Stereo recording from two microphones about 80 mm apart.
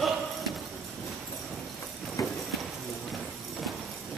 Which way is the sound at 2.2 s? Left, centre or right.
Left.